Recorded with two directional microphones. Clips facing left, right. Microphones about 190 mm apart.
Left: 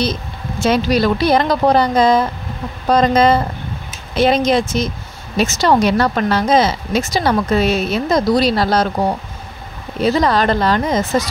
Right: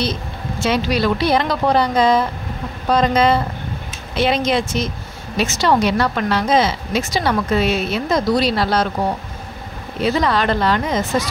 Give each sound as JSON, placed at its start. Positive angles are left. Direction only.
{"t": 0.7, "sound": "a woman's voice", "side_deg": 40}
{"t": 10.0, "sound": "speech", "side_deg": 40}